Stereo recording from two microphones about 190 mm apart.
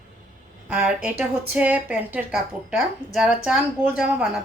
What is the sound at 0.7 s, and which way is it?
A woman's voice, 5° right (ahead or behind).